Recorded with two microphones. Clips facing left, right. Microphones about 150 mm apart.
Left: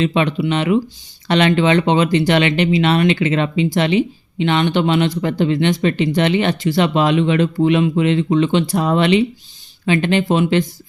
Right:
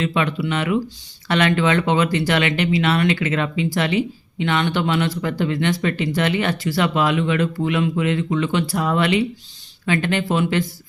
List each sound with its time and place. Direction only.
0.0 s speech: 20° left (ahead or behind)